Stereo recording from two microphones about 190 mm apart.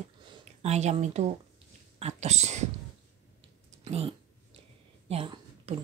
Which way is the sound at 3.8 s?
30° right (ahead or behind).